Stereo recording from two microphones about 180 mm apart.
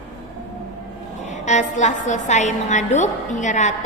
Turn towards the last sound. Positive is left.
turn(degrees=40)  # may be behind; listen again after turning